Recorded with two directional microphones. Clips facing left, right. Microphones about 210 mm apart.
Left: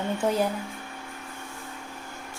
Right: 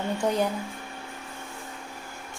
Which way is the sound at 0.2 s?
5° left (ahead or behind).